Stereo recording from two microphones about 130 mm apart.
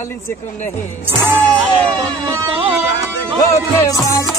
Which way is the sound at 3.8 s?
25° left (ahead or behind).